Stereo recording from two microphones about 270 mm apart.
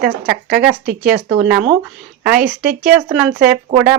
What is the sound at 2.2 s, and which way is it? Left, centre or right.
Speech, centre.